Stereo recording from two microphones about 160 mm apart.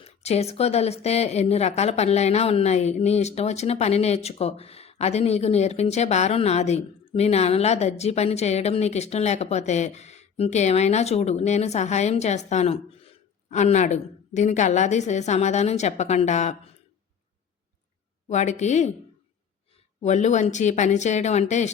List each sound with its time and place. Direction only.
0.0 s speech: 40° left (ahead or behind)
18.3 s speech: 45° left (ahead or behind)
20.0 s speech: 45° left (ahead or behind)